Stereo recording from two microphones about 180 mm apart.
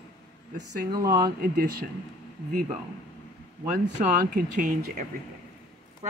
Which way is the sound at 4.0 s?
50° right (ahead or behind).